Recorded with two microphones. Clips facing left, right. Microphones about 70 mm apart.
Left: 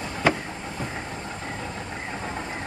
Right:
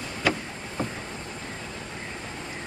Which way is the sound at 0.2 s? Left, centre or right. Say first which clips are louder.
Left 3 dB; left.